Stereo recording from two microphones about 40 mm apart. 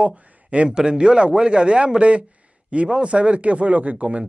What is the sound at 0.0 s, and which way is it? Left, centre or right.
Speech, right.